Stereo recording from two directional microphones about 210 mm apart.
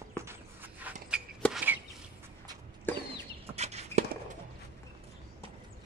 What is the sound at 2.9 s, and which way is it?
Chicken, 10° left (ahead or behind).